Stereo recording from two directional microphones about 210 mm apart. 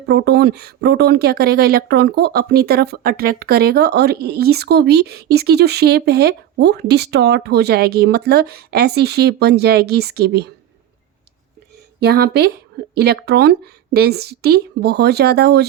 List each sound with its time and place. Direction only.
0.0 s speech: 50° right (ahead or behind)
12.0 s speech: 50° right (ahead or behind)